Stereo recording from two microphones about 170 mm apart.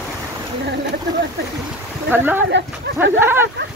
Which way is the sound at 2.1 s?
10° right (ahead or behind).